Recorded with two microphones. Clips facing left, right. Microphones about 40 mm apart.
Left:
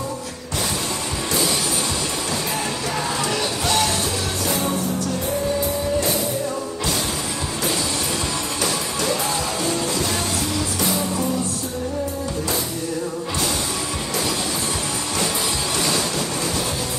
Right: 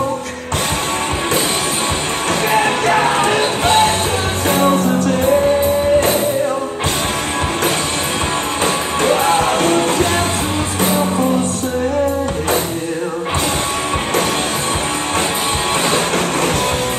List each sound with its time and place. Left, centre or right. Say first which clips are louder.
2.5 s music: right 11 dB; right
4.5 s music: right 11 dB; right
9.0 s music: right 11 dB; right